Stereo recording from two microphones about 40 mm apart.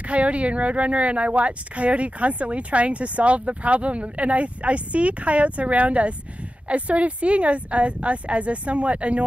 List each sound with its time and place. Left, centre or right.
0.0 s speech: right